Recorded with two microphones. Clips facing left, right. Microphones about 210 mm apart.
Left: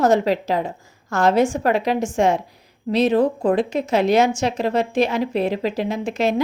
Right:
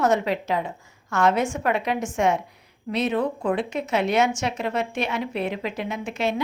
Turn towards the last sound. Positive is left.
turn(degrees=35)  # may be behind; listen again after turning